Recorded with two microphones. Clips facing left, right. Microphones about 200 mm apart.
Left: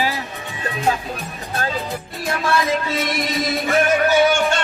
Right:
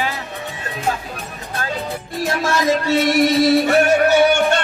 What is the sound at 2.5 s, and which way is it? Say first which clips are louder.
Music: right 3 dB; 75° right (ahead or behind).